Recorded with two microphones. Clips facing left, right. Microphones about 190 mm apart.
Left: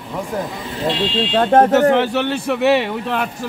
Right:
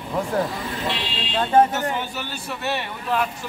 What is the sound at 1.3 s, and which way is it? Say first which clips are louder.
A man's voice: left 5 dB; 65° left (ahead or behind).